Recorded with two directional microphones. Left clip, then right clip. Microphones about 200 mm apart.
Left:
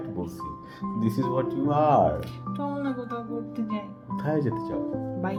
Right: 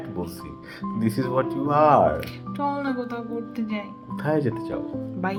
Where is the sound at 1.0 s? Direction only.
10° left (ahead or behind).